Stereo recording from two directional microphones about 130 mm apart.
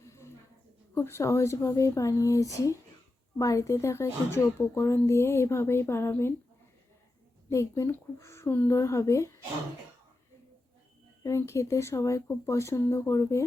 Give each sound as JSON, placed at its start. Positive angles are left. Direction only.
{"t": 0.0, "sound": "a sound", "side_deg": 20}
{"t": 0.9, "sound": "speech", "side_deg": 20}
{"t": 7.5, "sound": "speech", "side_deg": 20}
{"t": 11.2, "sound": "speech", "side_deg": 20}